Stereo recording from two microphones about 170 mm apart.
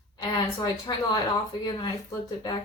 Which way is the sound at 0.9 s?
25° left (ahead or behind).